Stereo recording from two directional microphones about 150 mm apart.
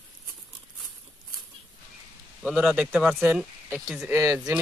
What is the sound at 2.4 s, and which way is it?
Speech, 5° right (ahead or behind).